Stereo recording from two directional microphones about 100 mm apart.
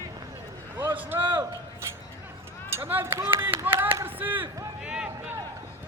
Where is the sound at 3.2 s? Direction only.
25° right (ahead or behind).